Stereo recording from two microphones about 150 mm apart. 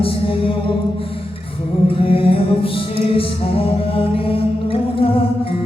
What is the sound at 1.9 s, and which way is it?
Music, 40° left (ahead or behind).